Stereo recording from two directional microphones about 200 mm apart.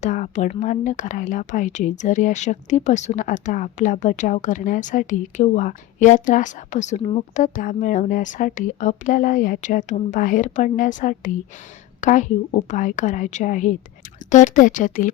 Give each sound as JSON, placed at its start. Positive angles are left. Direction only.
{"t": 0.0, "sound": "speech", "side_deg": 40}